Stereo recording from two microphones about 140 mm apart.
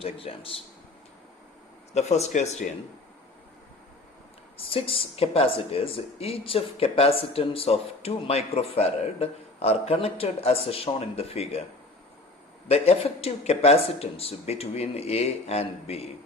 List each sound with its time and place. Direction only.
0.0 s speech: 40° left (ahead or behind)
1.9 s speech: 50° left (ahead or behind)
4.5 s speech: 40° left (ahead or behind)
12.6 s speech: 45° left (ahead or behind)